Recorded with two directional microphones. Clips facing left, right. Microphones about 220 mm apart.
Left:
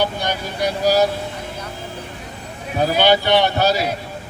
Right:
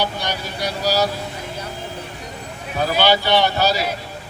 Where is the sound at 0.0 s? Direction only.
50° left (ahead or behind).